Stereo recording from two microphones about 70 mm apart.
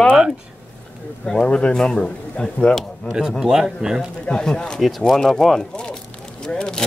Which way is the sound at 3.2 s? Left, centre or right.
Centre.